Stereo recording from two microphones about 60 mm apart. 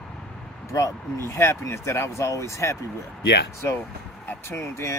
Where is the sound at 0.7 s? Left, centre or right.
Left.